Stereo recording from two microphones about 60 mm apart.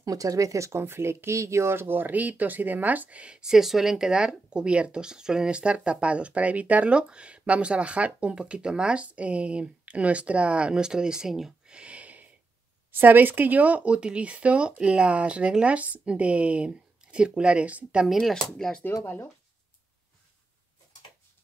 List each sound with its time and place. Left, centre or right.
0.0 s speech: right; by 11.7 s centre
11.7 s a sound: centre
12.9 s speech: right
18.0 s speech: centre